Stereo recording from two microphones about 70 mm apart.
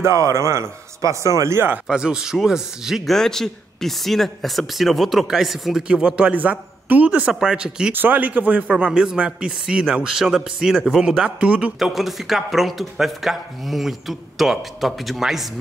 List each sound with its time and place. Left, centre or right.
0.0 s a man's voice: right
1.4 s speech: right
1.9 s speech: centre
3.1 s speech: centre
7.9 s speech: right
11.8 s speech: centre